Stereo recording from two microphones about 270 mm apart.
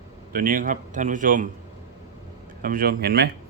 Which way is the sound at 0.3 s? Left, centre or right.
Right.